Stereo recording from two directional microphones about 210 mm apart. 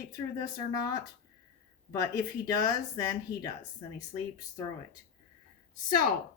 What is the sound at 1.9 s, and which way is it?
Speech, 15° left (ahead or behind).